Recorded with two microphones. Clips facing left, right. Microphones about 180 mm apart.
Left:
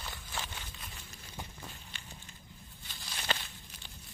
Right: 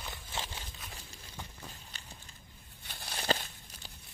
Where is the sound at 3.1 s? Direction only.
35° right (ahead or behind).